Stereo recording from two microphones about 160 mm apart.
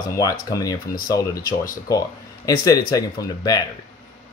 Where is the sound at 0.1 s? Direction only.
20° left (ahead or behind).